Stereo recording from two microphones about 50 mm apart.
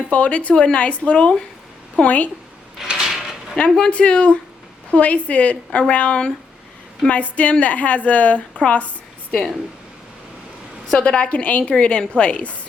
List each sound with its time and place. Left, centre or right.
0.1 s speech: left
2.8 s a sound: centre
3.1 s dishes: centre
3.5 s speech: left
10.9 s speech: left